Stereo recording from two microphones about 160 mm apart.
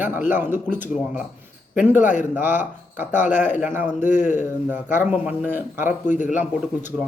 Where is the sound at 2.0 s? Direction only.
50° left (ahead or behind).